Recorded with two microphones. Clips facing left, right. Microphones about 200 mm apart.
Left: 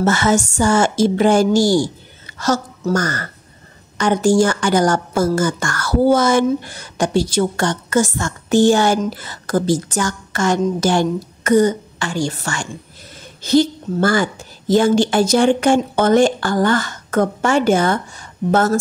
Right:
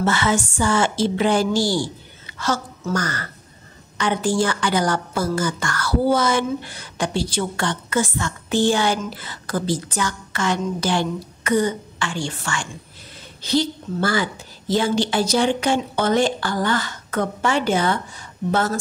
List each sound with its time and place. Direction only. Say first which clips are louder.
0.0 s a woman's voice: left 5 dB; 45° left (ahead or behind)